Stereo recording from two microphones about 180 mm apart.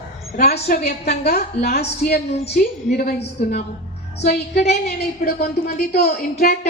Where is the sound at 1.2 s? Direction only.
65° left (ahead or behind).